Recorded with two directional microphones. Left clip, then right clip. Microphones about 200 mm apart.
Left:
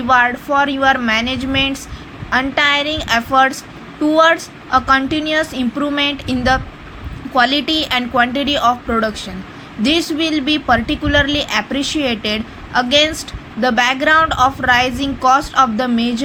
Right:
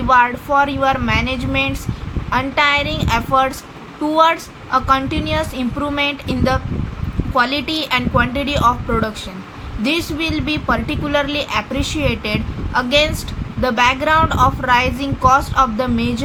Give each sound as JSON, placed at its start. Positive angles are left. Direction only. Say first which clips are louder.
{"t": 0.1, "sound": "a woman's voice", "louder": "even", "side_deg": 10}